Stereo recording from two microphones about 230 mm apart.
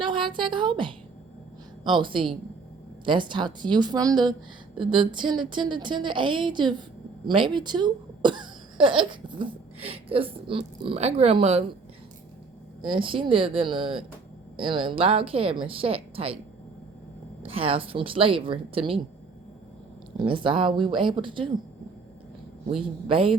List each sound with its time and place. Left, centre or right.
0.0 s a woman's voice: right
12.9 s speech: right
17.4 s speech: right
20.1 s speech: right
23.0 s speech: right